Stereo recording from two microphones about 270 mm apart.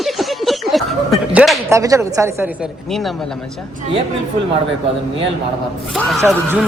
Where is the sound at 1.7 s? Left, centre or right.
Centre.